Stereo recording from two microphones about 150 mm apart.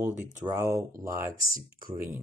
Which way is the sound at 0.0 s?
15° right (ahead or behind).